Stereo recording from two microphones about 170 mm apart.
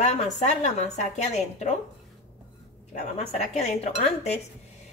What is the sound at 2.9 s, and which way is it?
Speech, 40° left (ahead or behind).